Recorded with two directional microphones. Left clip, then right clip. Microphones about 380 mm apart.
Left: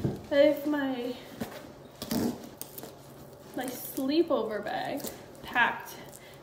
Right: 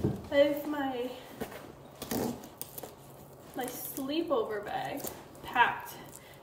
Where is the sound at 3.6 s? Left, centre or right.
Centre.